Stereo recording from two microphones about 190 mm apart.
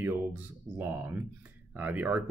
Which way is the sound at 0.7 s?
10° right (ahead or behind).